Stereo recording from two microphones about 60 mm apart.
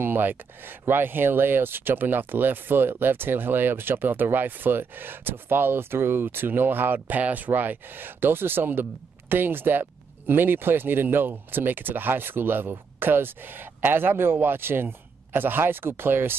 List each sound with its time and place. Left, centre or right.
0.0 s speech: right